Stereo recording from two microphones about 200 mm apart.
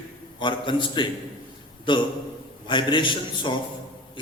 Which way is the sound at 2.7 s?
25° left (ahead or behind).